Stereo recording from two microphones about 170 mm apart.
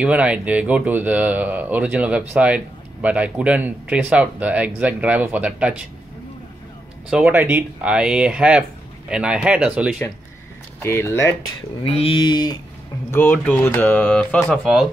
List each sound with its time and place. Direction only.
0.0 s speech: 5° right (ahead or behind)
7.1 s speech: 5° right (ahead or behind)
10.8 s speech: 15° left (ahead or behind)
11.8 s mantra: 35° left (ahead or behind)
13.1 s speech: 10° left (ahead or behind)